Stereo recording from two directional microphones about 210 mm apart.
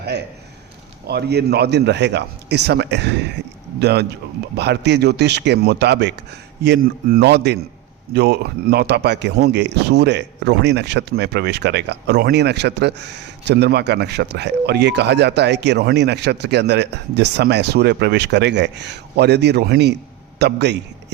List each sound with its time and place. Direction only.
1.0 s speech: 50° right (ahead or behind)